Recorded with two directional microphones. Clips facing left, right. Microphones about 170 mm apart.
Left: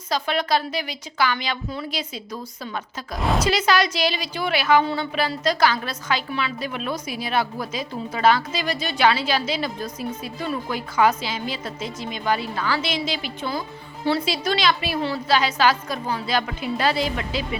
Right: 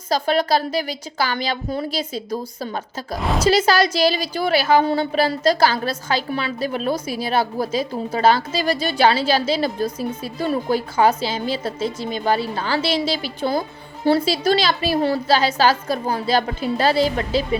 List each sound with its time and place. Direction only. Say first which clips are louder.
0.1 s a woman's voice: right 4 dB; 35° right (ahead or behind)
3.2 s a woman's voice: even; centre (ahead or behind)
3.4 s a woman's voice: right 6 dB; 30° right (ahead or behind)